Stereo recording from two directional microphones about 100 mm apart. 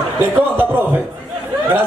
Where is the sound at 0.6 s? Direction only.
20° right (ahead or behind).